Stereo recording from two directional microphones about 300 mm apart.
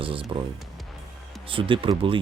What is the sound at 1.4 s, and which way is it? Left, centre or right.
Speech, centre.